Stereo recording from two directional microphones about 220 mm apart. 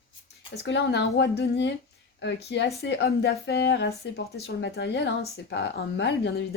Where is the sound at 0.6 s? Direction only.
55° left (ahead or behind).